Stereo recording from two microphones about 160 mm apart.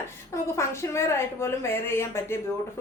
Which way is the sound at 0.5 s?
15° left (ahead or behind).